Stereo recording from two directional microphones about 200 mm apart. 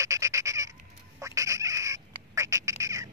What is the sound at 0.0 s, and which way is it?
Goat, 15° right (ahead or behind).